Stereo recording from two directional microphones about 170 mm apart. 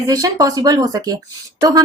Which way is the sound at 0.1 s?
20° right (ahead or behind).